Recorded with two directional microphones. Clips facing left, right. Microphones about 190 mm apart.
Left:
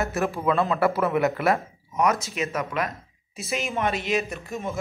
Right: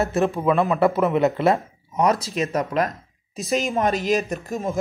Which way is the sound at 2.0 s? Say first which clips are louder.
Right 3 dB; 30° right (ahead or behind).